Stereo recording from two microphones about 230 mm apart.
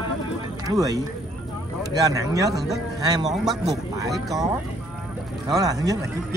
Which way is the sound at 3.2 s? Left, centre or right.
Centre.